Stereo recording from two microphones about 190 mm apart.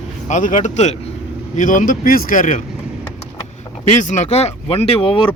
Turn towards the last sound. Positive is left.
turn(degrees=30)  # may be behind; listen again after turning